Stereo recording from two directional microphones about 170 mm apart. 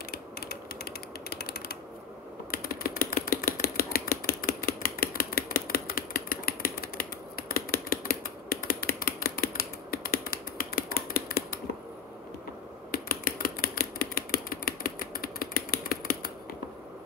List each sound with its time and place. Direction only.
0.1 s mechanisms: 65° left (ahead or behind)
2.5 s typewriter: 60° left (ahead or behind)
12.9 s a sound: 60° left (ahead or behind)